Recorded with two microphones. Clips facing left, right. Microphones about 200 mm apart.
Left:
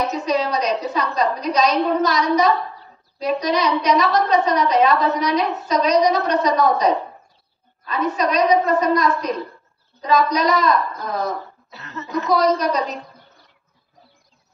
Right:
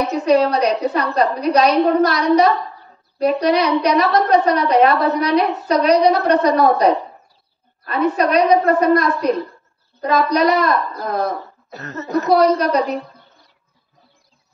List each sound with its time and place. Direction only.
0.1 s a woman's voice: 60° right (ahead or behind); by 12.3 s 45° right (ahead or behind)
12.3 s a woman's voice: 60° right (ahead or behind)